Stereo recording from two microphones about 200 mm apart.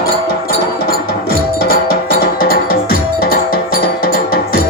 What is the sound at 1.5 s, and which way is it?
Music, 50° left (ahead or behind).